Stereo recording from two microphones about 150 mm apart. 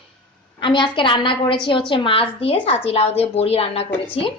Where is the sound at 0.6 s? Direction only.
30° left (ahead or behind).